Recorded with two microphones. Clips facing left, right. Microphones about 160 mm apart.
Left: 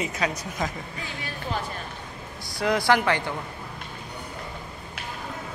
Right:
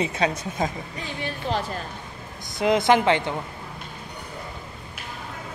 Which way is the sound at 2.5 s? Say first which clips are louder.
Right 3 dB; 20° right (ahead or behind).